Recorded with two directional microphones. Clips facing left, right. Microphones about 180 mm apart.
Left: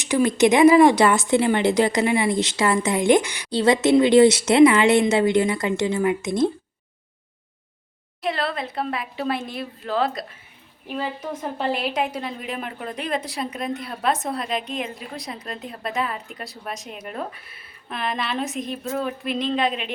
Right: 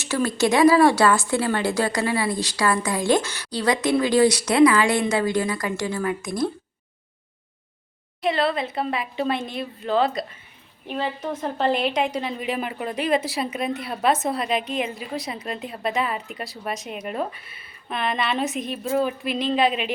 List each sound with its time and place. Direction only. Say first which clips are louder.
0.0 s speech: left 4 dB; 15° left (ahead or behind)
8.2 s a woman's voice: right 3 dB; centre (ahead or behind)